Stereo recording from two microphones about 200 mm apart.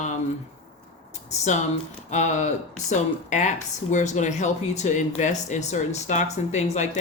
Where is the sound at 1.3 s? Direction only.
35° left (ahead or behind).